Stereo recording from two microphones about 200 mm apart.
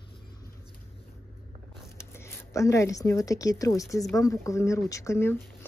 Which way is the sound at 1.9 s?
15° left (ahead or behind).